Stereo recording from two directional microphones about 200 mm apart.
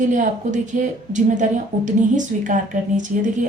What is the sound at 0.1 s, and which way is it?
Speech, 40° right (ahead or behind).